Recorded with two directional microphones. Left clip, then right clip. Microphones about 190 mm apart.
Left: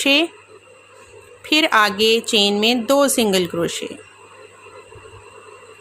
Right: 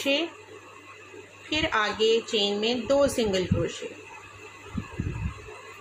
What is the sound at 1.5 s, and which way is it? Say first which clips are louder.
Speech: left 11 dB; 50° left (ahead or behind).